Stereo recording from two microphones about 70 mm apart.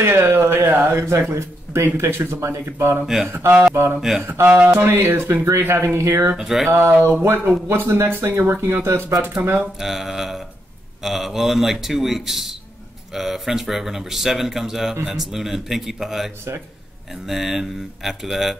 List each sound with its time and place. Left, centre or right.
0.0 s speech: right
6.3 s speech: centre
6.7 s speech: right
9.8 s speech: centre